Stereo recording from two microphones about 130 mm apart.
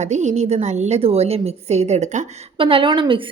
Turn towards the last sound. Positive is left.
turn(degrees=-40)  # may be behind; listen again after turning